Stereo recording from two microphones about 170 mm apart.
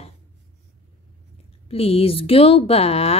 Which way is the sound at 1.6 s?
35° left (ahead or behind).